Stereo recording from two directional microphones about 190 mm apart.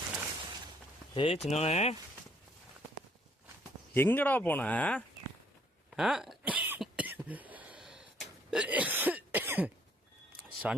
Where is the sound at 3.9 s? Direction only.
10° left (ahead or behind).